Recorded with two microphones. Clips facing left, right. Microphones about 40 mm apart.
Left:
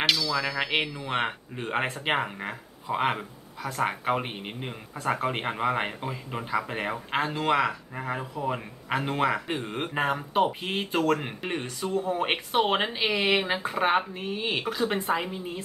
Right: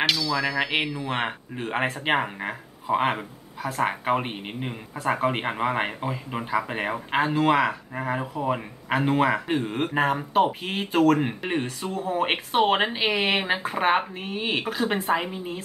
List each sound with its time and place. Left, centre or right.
0.0 s speech: centre
11.6 s speech: right
12.1 s speech: centre